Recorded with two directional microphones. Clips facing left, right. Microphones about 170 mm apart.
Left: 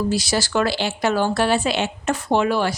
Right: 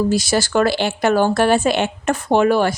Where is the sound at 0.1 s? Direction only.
50° right (ahead or behind).